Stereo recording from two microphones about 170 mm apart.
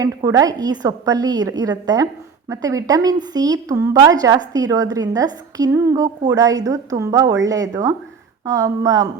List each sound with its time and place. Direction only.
0.0 s speech: 20° right (ahead or behind)